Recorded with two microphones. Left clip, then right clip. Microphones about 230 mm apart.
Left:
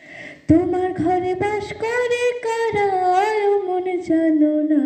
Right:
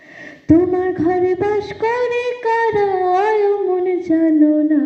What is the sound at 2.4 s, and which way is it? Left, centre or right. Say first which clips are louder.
Singing: right 4 dB; left.